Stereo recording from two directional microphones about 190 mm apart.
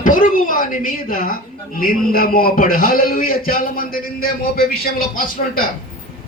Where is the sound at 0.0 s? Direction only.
45° left (ahead or behind).